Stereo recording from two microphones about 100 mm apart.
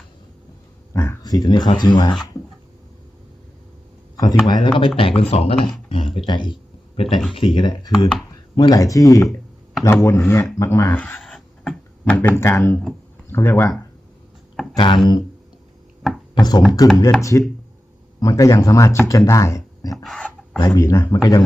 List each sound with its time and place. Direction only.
0.9 s a sound: 25° left (ahead or behind)
1.2 s speech: 40° left (ahead or behind)
4.2 s speech: 40° left (ahead or behind)
4.9 s speech: 70° left (ahead or behind)
5.9 s speech: 70° left (ahead or behind); by 6.6 s 55° left (ahead or behind)
6.9 s speech: 65° left (ahead or behind); by 11.0 s 25° left (ahead or behind)
11.2 s a sound: 5° left (ahead or behind)
12.1 s speech: 25° left (ahead or behind)
14.5 s a sound: 5° left (ahead or behind)
14.8 s speech: 55° left (ahead or behind)
16.3 s speech: 45° left (ahead or behind)
17.2 s speech: 30° left (ahead or behind)
20.0 s a sound: 10° left (ahead or behind)
20.7 s speech: 30° left (ahead or behind)